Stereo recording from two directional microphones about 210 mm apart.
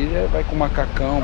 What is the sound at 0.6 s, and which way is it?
Speech, 20° left (ahead or behind).